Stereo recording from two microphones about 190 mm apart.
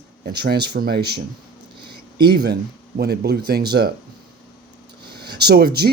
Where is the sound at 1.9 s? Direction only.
55° right (ahead or behind).